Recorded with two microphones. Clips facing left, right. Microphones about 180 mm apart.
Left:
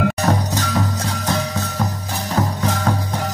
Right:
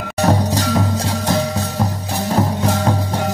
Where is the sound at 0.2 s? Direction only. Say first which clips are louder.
Right 3 dB; 30° right (ahead or behind).